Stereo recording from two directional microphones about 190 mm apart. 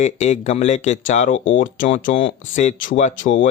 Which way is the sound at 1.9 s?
35° left (ahead or behind).